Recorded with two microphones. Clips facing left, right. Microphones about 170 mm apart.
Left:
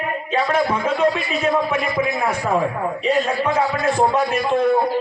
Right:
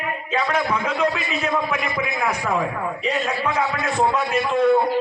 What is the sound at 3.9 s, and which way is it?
Speech, 30° left (ahead or behind).